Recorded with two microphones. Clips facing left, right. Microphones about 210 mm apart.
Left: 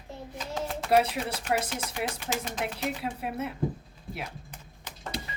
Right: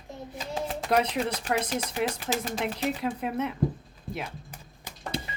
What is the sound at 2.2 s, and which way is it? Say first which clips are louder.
Speech: right 3 dB; 35° right (ahead or behind).